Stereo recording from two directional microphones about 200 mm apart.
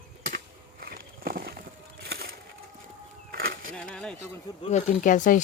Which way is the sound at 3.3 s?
45° right (ahead or behind).